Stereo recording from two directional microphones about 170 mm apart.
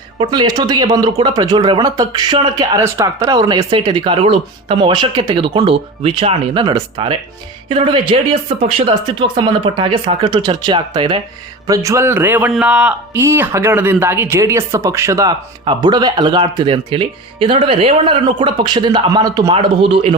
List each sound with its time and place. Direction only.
0.2 s speech: 25° right (ahead or behind)